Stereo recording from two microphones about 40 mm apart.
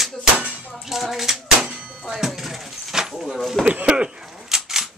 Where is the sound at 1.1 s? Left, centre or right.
Centre.